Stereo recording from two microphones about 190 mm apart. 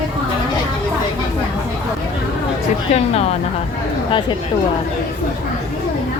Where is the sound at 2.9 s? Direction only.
35° left (ahead or behind).